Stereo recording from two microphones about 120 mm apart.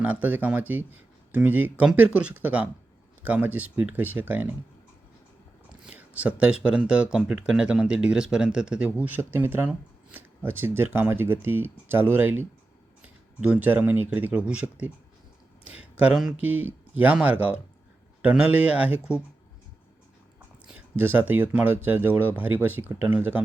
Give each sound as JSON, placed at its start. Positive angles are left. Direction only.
{"t": 0.0, "sound": "speech", "side_deg": -15}
{"t": 5.8, "sound": "speech", "side_deg": -10}
{"t": 20.7, "sound": "speech", "side_deg": -15}